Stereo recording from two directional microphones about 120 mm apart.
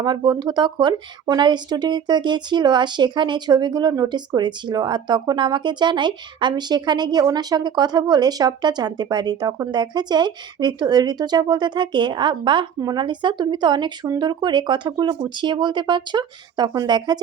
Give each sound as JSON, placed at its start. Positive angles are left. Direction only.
{"t": 0.0, "sound": "speech", "side_deg": -35}